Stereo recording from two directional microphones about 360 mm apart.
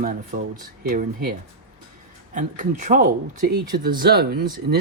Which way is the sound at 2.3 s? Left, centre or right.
Right.